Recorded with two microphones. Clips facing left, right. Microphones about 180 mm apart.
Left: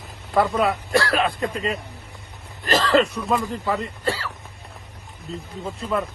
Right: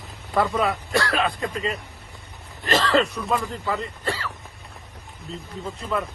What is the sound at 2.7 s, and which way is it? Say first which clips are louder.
Speech: left 2 dB; centre (ahead or behind).